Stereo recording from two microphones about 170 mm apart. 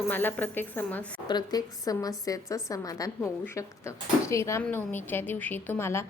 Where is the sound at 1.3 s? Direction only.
25° left (ahead or behind).